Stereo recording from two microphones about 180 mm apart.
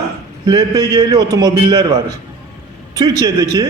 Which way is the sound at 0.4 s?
20° right (ahead or behind).